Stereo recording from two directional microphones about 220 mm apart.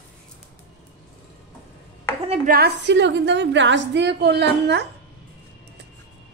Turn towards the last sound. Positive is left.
turn(degrees=-50)  # may be behind; listen again after turning